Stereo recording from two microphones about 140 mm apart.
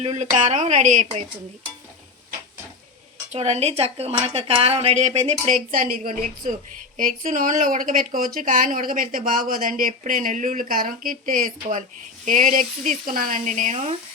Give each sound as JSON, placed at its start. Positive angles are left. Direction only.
{"t": 0.0, "sound": "speech", "side_deg": -50}
{"t": 3.3, "sound": "a woman's voice", "side_deg": -50}
{"t": 5.7, "sound": "a woman's voice", "side_deg": -80}
{"t": 6.9, "sound": "speech", "side_deg": -70}